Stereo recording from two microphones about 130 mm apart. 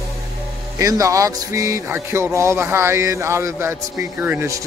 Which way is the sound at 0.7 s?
25° right (ahead or behind).